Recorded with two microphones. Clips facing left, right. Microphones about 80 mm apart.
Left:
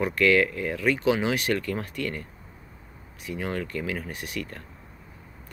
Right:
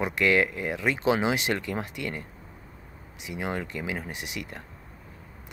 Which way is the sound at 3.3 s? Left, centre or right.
Centre.